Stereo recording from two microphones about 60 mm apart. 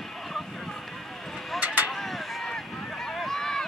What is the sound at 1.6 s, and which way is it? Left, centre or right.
Vehicle, right.